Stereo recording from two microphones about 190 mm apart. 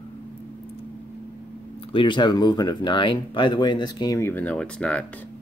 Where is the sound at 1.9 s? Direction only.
25° left (ahead or behind); by 5.0 s 5° left (ahead or behind).